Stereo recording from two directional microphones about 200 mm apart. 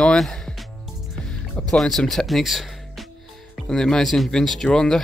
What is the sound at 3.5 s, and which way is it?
Speech, centre (ahead or behind).